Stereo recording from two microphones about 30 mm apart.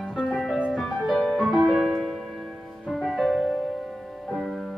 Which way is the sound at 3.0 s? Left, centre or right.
Centre.